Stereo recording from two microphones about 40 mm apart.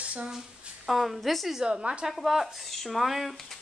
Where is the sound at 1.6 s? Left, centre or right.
Centre.